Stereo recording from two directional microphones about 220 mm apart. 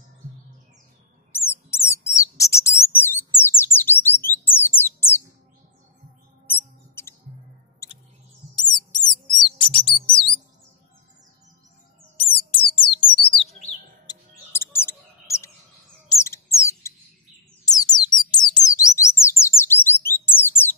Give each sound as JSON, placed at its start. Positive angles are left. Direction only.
{"t": 1.3, "sound": "bird", "side_deg": 10}
{"t": 7.0, "sound": "music", "side_deg": 10}
{"t": 8.5, "sound": "bird", "side_deg": 20}
{"t": 12.2, "sound": "bird", "side_deg": 25}
{"t": 14.0, "sound": "chirp", "side_deg": 10}
{"t": 16.1, "sound": "a sound", "side_deg": 15}
{"t": 18.3, "sound": "bird", "side_deg": 20}